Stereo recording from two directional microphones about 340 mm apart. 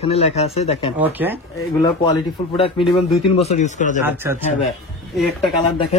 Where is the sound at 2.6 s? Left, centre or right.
Centre.